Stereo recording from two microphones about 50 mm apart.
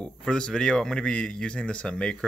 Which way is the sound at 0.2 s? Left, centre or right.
Centre.